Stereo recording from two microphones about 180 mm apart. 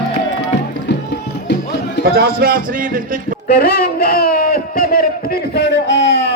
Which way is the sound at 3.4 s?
60° left (ahead or behind).